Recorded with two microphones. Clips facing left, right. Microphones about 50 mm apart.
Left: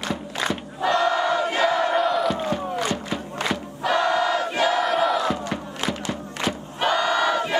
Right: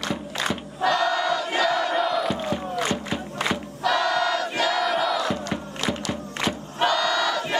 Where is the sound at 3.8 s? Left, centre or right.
Left.